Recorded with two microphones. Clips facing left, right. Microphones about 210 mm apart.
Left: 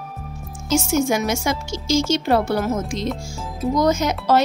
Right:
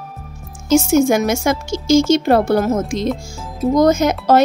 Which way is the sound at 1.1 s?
50° right (ahead or behind).